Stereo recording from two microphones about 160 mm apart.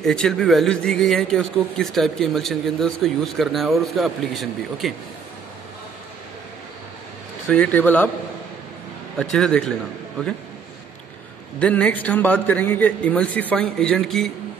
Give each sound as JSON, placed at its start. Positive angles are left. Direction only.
{"t": 0.0, "sound": "speech", "side_deg": 5}
{"t": 7.4, "sound": "a man's voice", "side_deg": 5}
{"t": 9.2, "sound": "speech", "side_deg": 5}
{"t": 11.6, "sound": "a man's voice", "side_deg": 10}